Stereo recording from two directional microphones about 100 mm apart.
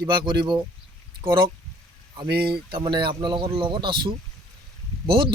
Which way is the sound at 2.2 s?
50° right (ahead or behind).